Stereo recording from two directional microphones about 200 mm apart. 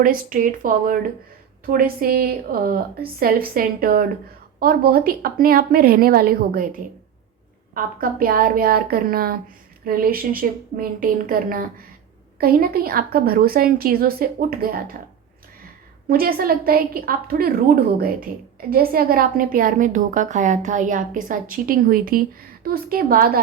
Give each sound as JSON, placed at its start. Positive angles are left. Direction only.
{"t": 0.0, "sound": "a woman's voice", "side_deg": -45}
{"t": 16.0, "sound": "a woman's voice", "side_deg": -50}